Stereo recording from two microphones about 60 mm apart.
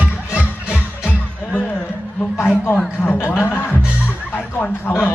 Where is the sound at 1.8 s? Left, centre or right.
Left.